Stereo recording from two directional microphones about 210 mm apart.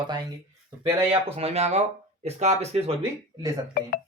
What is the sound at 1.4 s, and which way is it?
Speech, 30° right (ahead or behind).